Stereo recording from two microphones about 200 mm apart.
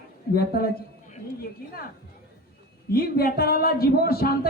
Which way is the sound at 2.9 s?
50° left (ahead or behind).